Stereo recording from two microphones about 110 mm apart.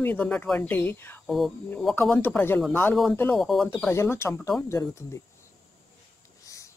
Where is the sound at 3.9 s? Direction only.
25° left (ahead or behind).